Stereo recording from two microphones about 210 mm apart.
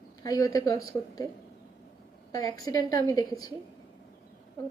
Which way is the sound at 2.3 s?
20° left (ahead or behind).